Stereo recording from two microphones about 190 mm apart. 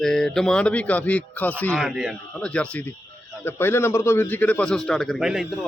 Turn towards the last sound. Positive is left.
turn(degrees=0)  # may be behind; listen again after turning